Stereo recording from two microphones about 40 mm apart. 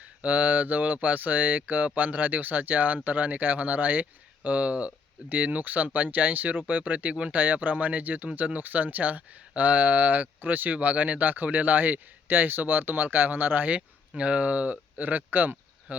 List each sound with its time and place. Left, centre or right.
0.0 s speech: right
14.2 s speech: right